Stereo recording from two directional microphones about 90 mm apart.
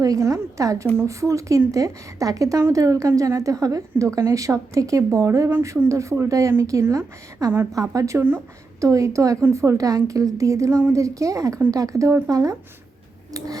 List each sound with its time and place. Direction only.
0.0 s a woman's voice: 40° right (ahead or behind)